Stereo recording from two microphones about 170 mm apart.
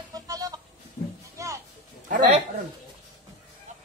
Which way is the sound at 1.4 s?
20° right (ahead or behind).